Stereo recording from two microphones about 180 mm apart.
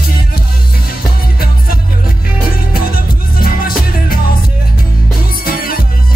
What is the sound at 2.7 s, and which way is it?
Music, 55° left (ahead or behind).